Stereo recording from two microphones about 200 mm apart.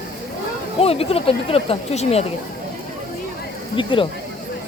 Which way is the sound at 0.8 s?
30° left (ahead or behind).